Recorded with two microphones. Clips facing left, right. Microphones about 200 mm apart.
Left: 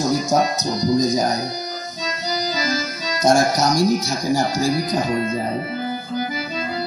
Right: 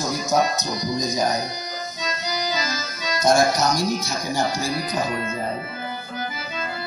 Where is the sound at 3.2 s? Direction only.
40° left (ahead or behind).